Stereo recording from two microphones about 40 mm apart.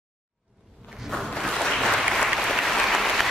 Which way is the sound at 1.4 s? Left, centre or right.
Centre.